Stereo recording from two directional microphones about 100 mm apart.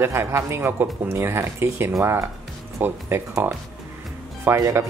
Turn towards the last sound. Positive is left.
turn(degrees=-30)  # may be behind; listen again after turning